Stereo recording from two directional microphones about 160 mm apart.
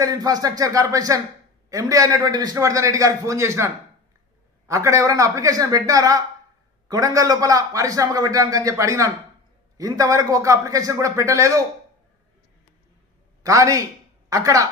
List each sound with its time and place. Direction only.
0.0 s a man's voice: 20° right (ahead or behind)
13.4 s a man's voice: 20° right (ahead or behind)